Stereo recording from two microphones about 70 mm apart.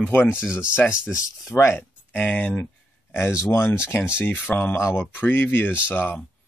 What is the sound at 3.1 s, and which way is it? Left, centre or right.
Speech, left.